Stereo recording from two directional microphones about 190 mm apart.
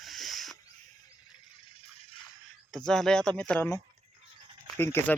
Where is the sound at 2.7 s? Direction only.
5° left (ahead or behind).